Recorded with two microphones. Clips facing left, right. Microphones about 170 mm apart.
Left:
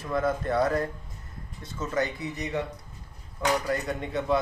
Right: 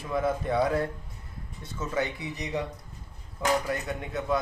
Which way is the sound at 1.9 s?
10° right (ahead or behind).